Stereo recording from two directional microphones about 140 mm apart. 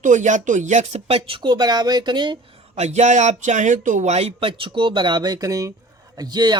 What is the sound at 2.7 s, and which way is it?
Speech, 55° right (ahead or behind).